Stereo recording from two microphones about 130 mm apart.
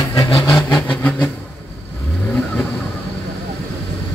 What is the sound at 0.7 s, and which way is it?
Vehicle, 10° left (ahead or behind).